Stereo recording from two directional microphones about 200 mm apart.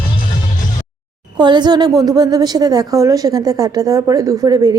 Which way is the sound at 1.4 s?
20° right (ahead or behind).